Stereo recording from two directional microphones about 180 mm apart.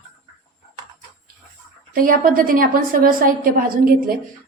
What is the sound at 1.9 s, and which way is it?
A woman's voice, 50° right (ahead or behind).